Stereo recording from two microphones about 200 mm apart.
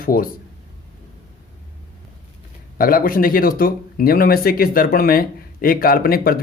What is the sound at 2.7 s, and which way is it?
Speech, 45° left (ahead or behind).